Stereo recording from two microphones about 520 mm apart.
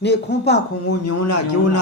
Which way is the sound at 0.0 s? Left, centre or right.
Centre.